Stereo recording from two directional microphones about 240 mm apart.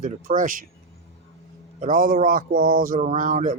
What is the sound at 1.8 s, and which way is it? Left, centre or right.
Speech, right.